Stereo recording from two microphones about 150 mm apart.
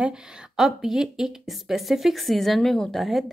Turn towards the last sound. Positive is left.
turn(degrees=0)  # may be behind; listen again after turning